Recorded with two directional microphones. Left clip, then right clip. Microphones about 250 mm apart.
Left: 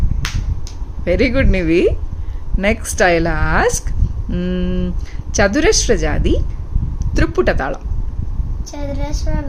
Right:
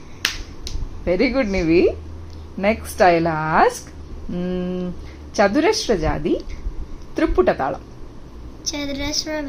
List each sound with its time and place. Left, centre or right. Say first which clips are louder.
1.0 s a woman's voice: left 3 dB; left
8.7 s a woman's voice: left 1 dB; centre